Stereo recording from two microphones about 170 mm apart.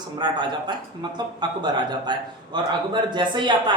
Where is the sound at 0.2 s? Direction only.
25° right (ahead or behind).